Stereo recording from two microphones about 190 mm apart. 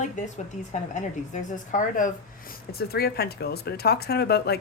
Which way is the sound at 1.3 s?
40° left (ahead or behind).